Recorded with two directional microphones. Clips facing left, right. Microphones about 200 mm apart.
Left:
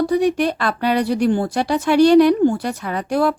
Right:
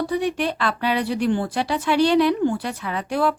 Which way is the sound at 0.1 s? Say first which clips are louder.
Left 6 dB; 45° left (ahead or behind).